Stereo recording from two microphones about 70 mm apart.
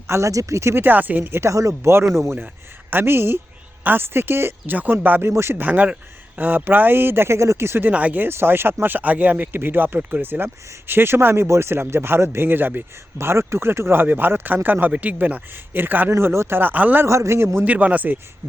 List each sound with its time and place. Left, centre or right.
0.1 s speech: right
0.9 s speech: right
1.5 s speech: right
2.1 s speech: right
5.6 s speech: right
16.1 s speech: right
17.1 s speech: right
17.7 s speech: right